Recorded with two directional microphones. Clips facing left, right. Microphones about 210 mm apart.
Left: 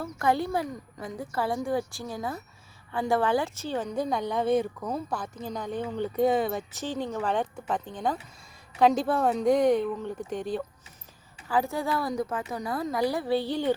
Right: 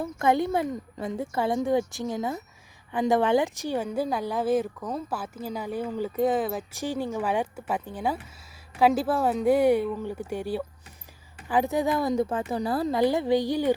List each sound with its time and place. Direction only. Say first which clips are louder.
0.0 s a woman's voice: right 3 dB; 20° right (ahead or behind)